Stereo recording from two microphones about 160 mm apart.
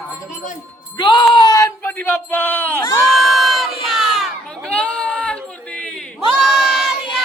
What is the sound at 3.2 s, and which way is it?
Crowd, centre (ahead or behind).